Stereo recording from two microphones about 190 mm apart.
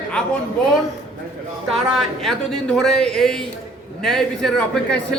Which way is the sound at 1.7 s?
Centre (ahead or behind).